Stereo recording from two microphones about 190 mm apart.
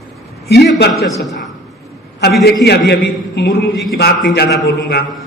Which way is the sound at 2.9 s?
60° left (ahead or behind).